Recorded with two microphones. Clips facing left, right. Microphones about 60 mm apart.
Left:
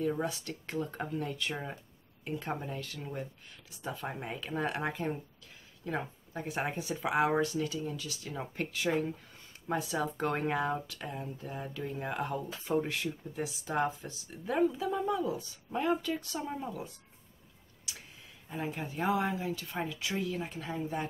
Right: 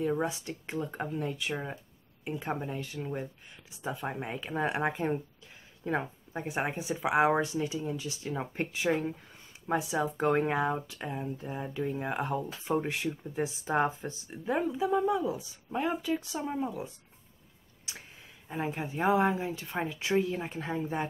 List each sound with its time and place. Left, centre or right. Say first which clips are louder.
0.0 s speech: right 2 dB; centre
17.9 s a sound: right 2 dB; right
18.5 s speech: right 3 dB; right